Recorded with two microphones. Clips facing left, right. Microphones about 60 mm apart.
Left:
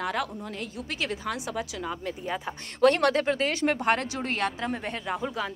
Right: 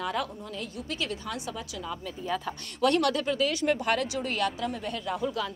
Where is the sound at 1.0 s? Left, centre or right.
Left.